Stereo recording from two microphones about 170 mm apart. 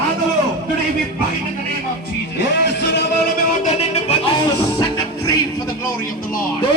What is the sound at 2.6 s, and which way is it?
Music, 85° left.